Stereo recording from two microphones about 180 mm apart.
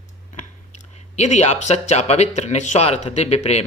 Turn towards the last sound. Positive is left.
turn(degrees=35)  # may be behind; listen again after turning